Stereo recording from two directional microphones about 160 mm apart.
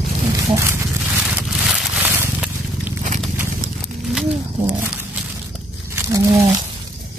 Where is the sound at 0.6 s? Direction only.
15° right (ahead or behind).